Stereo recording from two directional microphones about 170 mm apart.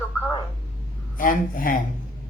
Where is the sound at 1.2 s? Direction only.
55° left (ahead or behind).